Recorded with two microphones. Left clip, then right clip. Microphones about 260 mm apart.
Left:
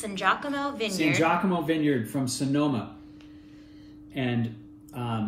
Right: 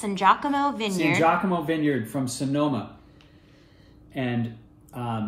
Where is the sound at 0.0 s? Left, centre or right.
Centre.